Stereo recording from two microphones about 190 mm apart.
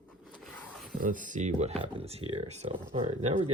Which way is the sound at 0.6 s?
Centre (ahead or behind).